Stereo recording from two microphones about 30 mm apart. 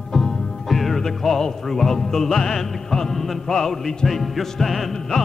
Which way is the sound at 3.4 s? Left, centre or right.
Centre.